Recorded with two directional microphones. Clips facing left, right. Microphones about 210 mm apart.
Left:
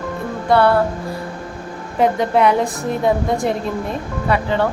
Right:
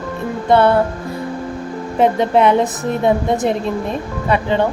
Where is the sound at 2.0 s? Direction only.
25° right (ahead or behind).